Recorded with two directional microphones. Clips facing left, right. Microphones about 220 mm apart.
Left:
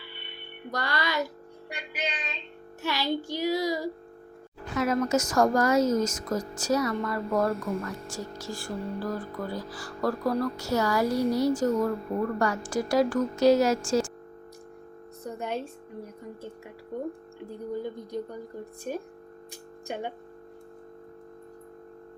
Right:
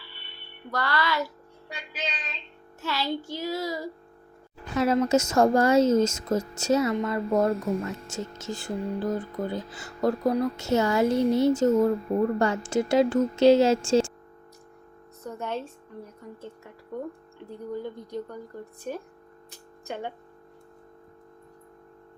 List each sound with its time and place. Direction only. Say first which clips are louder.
0.7 s child singing: right 2 dB; 15° left (ahead or behind)
2.8 s child singing: left 1 dB; 15° left (ahead or behind)
4.7 s speech: right 3 dB; 30° right (ahead or behind)
15.2 s child singing: even; 15° left (ahead or behind)
17.7 s child singing: even; 10° left (ahead or behind)
19.5 s a sound: even; 15° left (ahead or behind)